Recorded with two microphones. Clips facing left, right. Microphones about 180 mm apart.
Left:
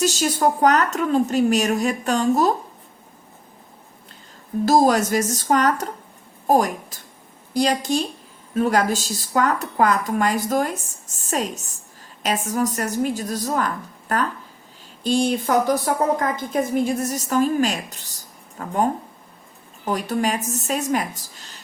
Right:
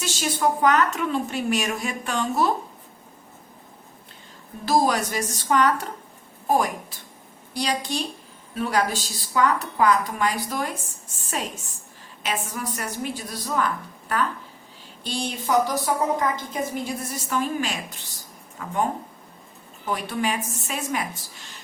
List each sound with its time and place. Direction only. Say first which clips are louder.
0.0 s a woman's voice: left 5 dB; 40° left (ahead or behind)
4.6 s a woman's voice: left 5 dB; 45° left (ahead or behind)
15.0 s a woman's voice: left 8 dB; 45° left (ahead or behind)
19.8 s a woman's voice: left 4 dB; 40° left (ahead or behind)